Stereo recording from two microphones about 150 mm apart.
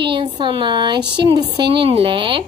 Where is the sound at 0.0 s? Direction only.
35° right (ahead or behind).